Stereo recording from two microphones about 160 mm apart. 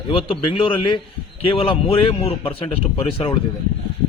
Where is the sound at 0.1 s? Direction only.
35° left (ahead or behind).